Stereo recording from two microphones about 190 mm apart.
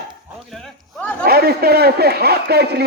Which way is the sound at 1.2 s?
55° right (ahead or behind).